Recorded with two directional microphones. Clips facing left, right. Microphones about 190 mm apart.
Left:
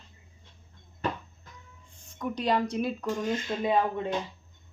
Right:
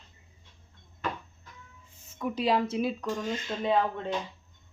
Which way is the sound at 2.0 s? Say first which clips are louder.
Right 1 dB; 5° right (ahead or behind).